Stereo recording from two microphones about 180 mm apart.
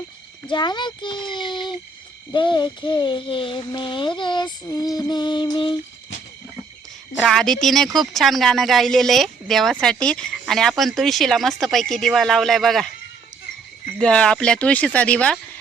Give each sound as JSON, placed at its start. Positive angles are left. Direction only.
{"t": 0.5, "sound": "speech", "side_deg": 25}
{"t": 7.2, "sound": "speech", "side_deg": 0}
{"t": 14.0, "sound": "speech", "side_deg": 5}